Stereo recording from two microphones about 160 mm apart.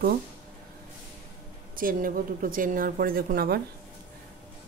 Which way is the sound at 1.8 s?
60° right (ahead or behind).